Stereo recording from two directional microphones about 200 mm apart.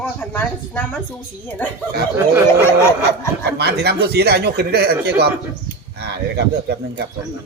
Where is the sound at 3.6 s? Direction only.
55° right (ahead or behind).